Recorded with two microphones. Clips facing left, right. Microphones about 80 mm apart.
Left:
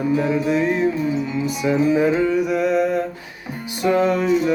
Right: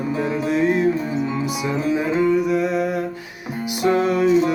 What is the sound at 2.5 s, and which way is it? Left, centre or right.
Humming, centre.